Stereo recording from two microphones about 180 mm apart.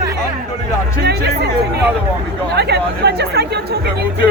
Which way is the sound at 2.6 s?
70° right (ahead or behind).